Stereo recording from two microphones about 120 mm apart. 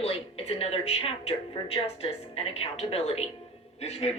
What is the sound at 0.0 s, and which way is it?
A man's voice, 55° left (ahead or behind).